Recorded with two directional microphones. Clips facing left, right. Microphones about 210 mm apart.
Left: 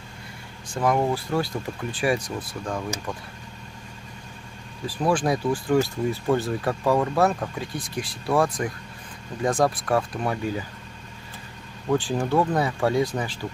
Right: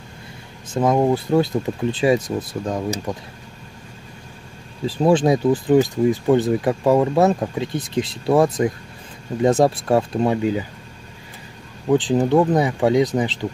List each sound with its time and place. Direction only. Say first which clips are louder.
0.7 s speech: right 5 dB; 20° right (ahead or behind)
4.8 s speech: right 7 dB; 25° right (ahead or behind)
11.9 s speech: right 6 dB; 20° right (ahead or behind)